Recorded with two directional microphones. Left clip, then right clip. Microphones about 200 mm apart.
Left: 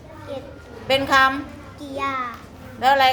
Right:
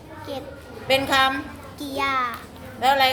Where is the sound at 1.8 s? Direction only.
35° right (ahead or behind).